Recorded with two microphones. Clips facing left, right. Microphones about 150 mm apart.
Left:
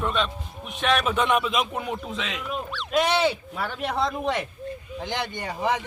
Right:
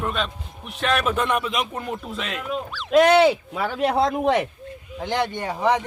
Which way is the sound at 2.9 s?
80° right.